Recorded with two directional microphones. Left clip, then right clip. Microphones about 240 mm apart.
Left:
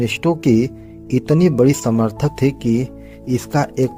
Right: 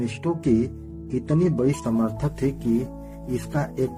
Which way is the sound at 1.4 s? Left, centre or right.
Left.